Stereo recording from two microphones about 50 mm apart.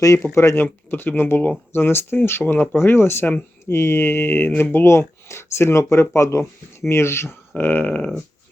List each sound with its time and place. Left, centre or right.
0.3 s speech: left
0.6 s speech: left
4.9 s speech: left
6.8 s speech: left
7.6 s a sound: left